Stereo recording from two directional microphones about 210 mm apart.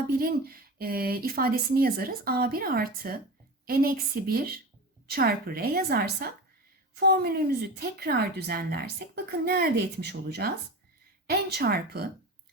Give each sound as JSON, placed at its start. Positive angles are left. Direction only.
{"t": 0.2, "sound": "a woman's voice", "side_deg": -45}